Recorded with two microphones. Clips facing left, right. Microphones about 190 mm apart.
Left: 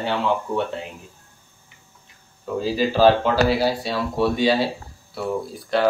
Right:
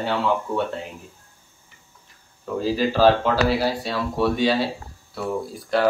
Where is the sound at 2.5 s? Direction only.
5° left (ahead or behind).